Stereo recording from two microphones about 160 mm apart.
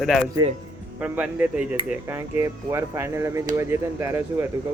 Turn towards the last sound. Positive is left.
turn(degrees=-15)  # may be behind; listen again after turning